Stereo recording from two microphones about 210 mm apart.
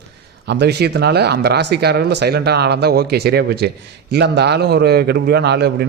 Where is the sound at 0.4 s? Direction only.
55° right (ahead or behind).